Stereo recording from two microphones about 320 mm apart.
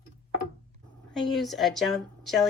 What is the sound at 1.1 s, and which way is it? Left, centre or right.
A woman's voice, centre.